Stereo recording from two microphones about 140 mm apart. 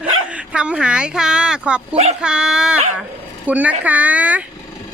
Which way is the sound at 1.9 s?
50° right (ahead or behind).